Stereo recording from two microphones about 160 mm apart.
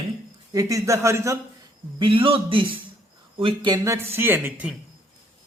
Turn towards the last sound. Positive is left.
turn(degrees=-10)  # may be behind; listen again after turning